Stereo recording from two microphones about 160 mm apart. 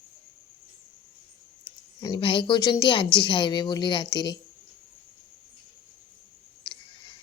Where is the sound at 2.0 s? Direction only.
30° left (ahead or behind).